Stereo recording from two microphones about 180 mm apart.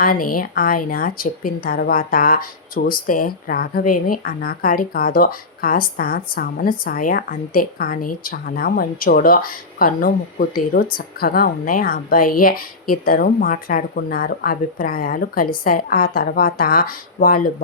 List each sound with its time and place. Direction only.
0.0 s a woman's voice: 50° left (ahead or behind)